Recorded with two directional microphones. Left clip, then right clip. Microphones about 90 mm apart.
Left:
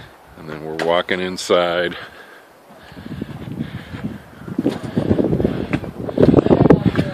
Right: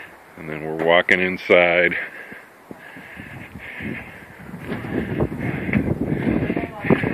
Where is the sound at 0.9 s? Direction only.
45° left (ahead or behind).